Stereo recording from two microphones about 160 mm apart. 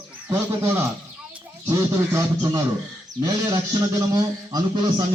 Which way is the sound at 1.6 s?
20° right (ahead or behind).